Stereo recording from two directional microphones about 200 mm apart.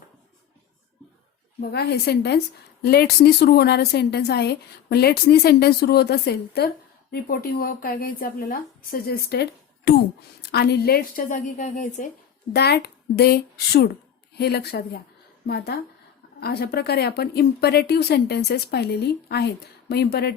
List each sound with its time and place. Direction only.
1.7 s a woman's voice: 55° left (ahead or behind); by 12.0 s 40° left (ahead or behind)
12.5 s a woman's voice: 55° left (ahead or behind)